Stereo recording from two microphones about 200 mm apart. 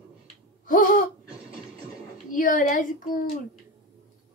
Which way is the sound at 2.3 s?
40° left (ahead or behind).